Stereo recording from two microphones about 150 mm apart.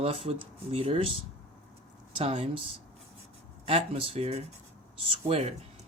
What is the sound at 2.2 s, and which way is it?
Speech, 40° right (ahead or behind).